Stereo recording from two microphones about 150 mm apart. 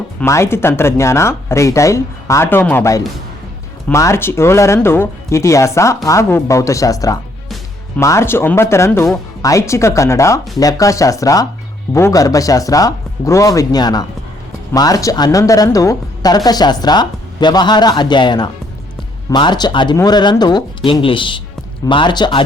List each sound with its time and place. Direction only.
0.3 s a woman's voice: 15° left (ahead or behind)